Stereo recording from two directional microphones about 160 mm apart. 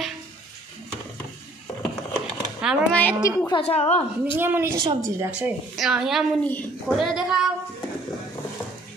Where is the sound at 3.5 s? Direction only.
40° left (ahead or behind).